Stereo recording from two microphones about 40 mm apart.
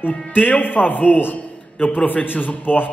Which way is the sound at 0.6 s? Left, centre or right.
Left.